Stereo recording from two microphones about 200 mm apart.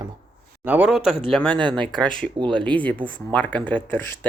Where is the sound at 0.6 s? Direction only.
10° right (ahead or behind).